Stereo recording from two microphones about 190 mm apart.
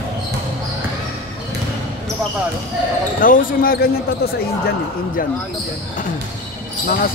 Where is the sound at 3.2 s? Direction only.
50° left (ahead or behind).